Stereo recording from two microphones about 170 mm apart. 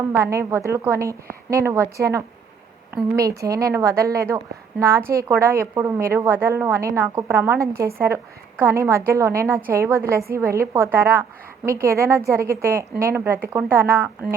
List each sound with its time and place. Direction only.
0.2 s a woman's voice: 15° right (ahead or behind)